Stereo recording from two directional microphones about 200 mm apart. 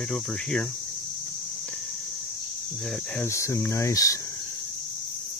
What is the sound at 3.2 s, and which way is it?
Speech, 15° left (ahead or behind).